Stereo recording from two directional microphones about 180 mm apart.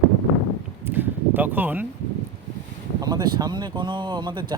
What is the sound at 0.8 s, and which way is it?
Speech, 10° right (ahead or behind).